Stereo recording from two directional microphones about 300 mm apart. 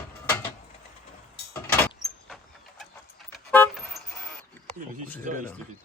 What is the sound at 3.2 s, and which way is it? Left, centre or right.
Vehicle, centre.